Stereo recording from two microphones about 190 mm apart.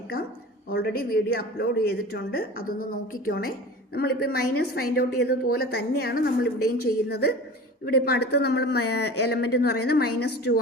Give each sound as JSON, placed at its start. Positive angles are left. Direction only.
{"t": 0.7, "sound": "a woman's voice", "side_deg": 55}